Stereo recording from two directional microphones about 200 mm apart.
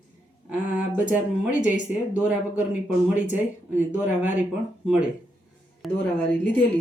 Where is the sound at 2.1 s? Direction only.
5° right (ahead or behind).